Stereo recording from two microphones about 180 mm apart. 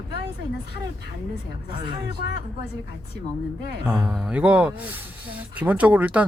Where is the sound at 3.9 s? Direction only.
5° right (ahead or behind).